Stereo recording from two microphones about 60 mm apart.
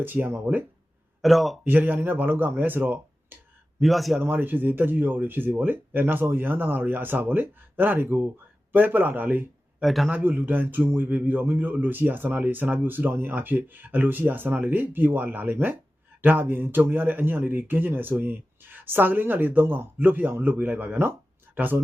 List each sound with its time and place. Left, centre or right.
0.0 s a man's voice: right
1.2 s speech: centre
1.6 s a man's voice: right
3.8 s speech: centre
4.2 s a man's voice: right
9.8 s speech: centre
10.1 s a man's voice: right